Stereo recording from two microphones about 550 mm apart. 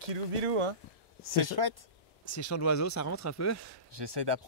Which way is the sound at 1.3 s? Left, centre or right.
Right.